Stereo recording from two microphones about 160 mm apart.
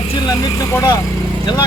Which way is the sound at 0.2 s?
25° left (ahead or behind).